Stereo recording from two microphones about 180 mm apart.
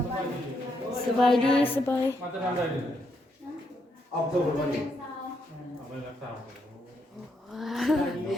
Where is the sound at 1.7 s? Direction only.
15° left (ahead or behind).